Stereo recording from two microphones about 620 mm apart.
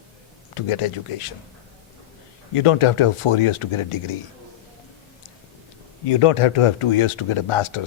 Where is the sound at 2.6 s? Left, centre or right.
Left.